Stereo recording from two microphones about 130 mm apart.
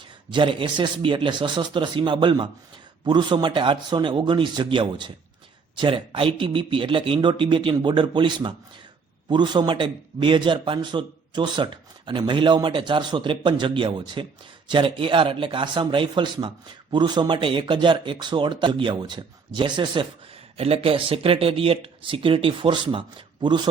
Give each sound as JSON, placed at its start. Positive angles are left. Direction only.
{"t": 0.3, "sound": "a man's voice", "side_deg": -40}
{"t": 20.6, "sound": "speech", "side_deg": -50}